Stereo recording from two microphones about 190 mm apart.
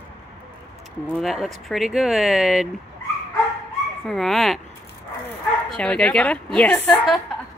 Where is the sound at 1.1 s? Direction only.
Centre (ahead or behind).